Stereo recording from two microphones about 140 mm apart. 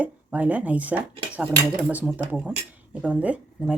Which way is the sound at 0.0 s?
10° right (ahead or behind).